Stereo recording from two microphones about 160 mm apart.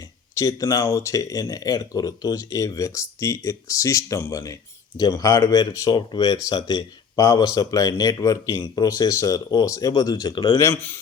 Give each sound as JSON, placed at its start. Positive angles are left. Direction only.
{"t": 0.3, "sound": "speech", "side_deg": 20}
{"t": 10.6, "sound": "speech", "side_deg": 15}